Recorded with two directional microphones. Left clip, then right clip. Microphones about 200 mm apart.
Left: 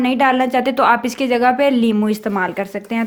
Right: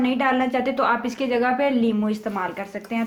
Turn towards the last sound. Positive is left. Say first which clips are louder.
# left 6 dB
turn(degrees=50)  # may be behind; listen again after turning